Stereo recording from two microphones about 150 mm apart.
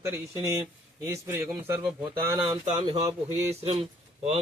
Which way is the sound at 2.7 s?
40° right (ahead or behind).